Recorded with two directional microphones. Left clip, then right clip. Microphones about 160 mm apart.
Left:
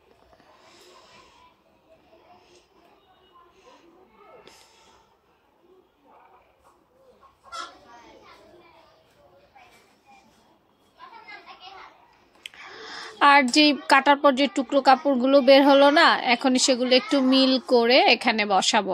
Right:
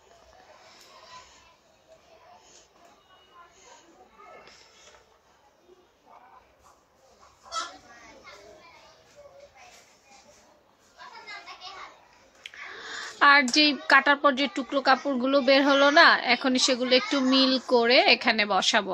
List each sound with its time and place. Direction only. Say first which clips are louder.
12.4 s a woman's voice: even; 25° left (ahead or behind)